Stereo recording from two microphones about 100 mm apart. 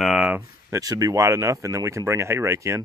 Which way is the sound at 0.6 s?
35° right (ahead or behind).